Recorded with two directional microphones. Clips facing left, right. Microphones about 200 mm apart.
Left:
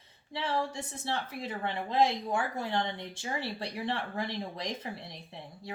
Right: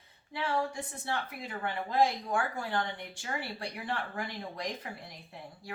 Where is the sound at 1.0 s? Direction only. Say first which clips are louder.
Left 2 dB; 25° left (ahead or behind).